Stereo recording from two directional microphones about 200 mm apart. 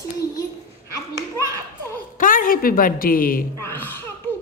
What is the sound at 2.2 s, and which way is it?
A woman's voice, 45° left (ahead or behind).